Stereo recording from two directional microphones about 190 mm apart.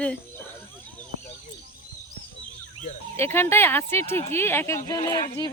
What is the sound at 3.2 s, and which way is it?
Speech, 10° left (ahead or behind).